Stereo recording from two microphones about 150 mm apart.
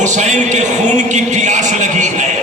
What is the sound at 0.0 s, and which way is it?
Music, 55° right (ahead or behind).